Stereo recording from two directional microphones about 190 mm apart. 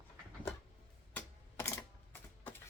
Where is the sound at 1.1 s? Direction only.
15° left (ahead or behind).